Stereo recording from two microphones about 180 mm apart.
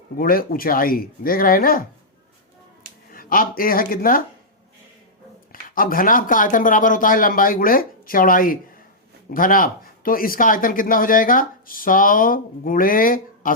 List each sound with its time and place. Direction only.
0.2 s speech: 55° left (ahead or behind)
3.1 s speech: 55° left (ahead or behind)
5.5 s speech: 50° left (ahead or behind)